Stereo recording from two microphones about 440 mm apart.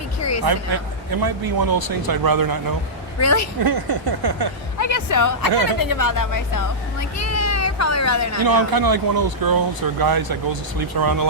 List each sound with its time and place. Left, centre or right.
0.2 s a sound: left
0.4 s speech: right
3.2 s a woman's voice: left
3.6 s a sound: right
4.8 s speech: left
8.4 s speech: right